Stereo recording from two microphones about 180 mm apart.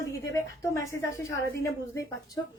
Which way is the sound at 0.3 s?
15° left (ahead or behind).